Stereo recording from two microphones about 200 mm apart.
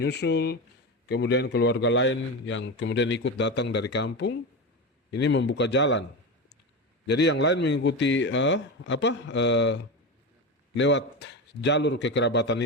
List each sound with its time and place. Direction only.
0.0 s a man's voice: 55° left (ahead or behind)
7.1 s a man's voice: 60° left (ahead or behind)